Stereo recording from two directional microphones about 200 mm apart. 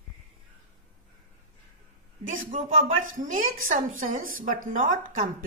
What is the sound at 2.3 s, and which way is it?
A woman's voice, 40° right (ahead or behind).